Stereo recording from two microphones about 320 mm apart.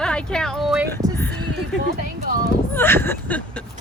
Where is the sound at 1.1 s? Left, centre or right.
Centre.